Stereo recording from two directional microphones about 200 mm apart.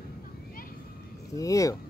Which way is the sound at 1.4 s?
15° left (ahead or behind).